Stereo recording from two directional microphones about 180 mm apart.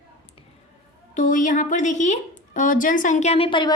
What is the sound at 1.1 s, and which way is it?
A woman's voice, 45° left (ahead or behind).